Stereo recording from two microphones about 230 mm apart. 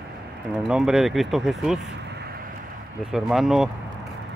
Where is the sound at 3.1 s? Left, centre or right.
Centre.